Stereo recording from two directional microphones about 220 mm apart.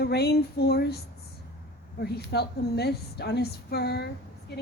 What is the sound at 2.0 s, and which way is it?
A woman's voice, 45° left (ahead or behind).